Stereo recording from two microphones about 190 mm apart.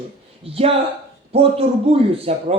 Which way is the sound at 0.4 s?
30° right (ahead or behind).